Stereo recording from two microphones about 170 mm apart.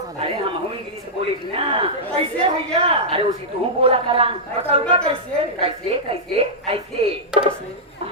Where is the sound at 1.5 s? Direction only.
30° right (ahead or behind).